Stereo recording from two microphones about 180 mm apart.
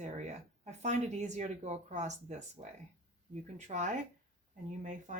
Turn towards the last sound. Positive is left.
turn(degrees=-45)  # may be behind; listen again after turning